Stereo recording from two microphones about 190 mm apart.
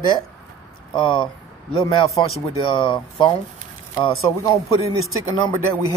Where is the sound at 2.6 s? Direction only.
25° left (ahead or behind).